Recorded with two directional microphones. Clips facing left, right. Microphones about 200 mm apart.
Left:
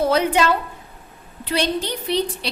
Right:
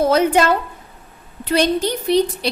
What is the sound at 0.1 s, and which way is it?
A woman's voice, 45° right (ahead or behind).